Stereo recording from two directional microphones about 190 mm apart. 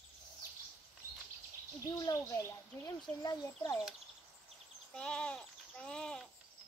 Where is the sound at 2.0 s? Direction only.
15° left (ahead or behind).